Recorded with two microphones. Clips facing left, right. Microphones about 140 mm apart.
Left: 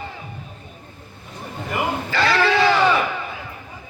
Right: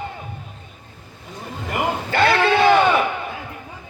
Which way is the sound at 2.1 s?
55° right (ahead or behind).